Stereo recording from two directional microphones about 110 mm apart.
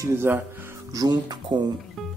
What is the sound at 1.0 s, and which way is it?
Speech, 40° right (ahead or behind).